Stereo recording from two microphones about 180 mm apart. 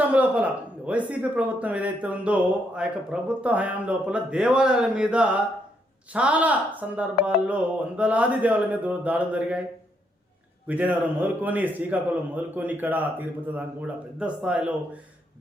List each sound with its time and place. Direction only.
0.1 s a man's voice: 10° right (ahead or behind)
10.7 s a man's voice: 10° right (ahead or behind)